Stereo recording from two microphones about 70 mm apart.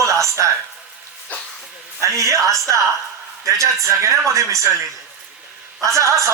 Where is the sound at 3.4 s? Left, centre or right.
Right.